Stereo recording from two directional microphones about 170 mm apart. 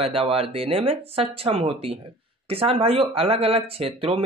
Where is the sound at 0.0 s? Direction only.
35° right (ahead or behind).